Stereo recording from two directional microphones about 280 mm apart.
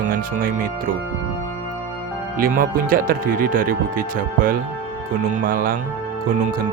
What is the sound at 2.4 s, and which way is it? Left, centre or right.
Speech, right.